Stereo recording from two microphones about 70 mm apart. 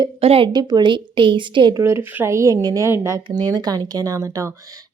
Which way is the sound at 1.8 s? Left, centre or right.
Right.